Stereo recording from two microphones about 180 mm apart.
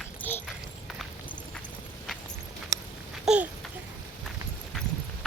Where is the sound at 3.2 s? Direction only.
5° right (ahead or behind).